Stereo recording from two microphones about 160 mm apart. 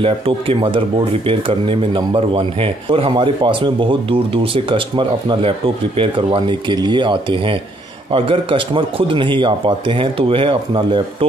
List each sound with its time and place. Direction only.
0.0 s speech: 35° right (ahead or behind)